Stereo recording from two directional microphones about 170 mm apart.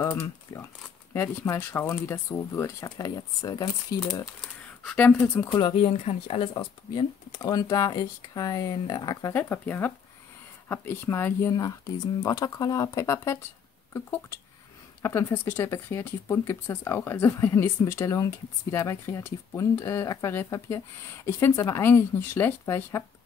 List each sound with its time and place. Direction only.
0.0 s speech: 20° left (ahead or behind)
4.4 s speech: 10° left (ahead or behind)
5.5 s speech: 30° left (ahead or behind)
9.3 s speech: 10° left (ahead or behind)
15.0 s speech: 15° left (ahead or behind)